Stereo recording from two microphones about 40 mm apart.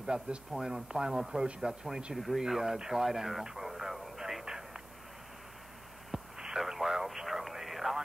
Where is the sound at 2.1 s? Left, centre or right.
Centre.